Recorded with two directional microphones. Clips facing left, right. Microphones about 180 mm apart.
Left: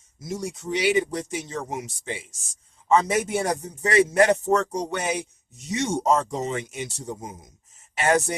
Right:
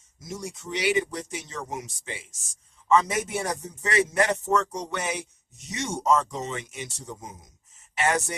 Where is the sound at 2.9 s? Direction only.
30° left (ahead or behind).